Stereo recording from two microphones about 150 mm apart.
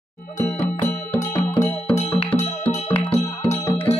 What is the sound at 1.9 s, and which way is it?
Music, 45° left (ahead or behind).